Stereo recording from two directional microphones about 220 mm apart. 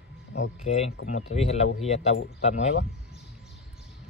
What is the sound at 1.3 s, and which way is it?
Speech, 30° left (ahead or behind).